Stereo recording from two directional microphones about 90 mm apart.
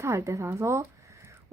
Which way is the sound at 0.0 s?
30° right (ahead or behind).